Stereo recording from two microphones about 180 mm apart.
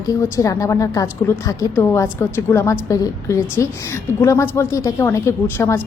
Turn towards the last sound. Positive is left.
turn(degrees=15)  # may be behind; listen again after turning